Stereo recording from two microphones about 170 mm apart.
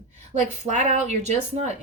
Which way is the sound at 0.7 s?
45° right (ahead or behind).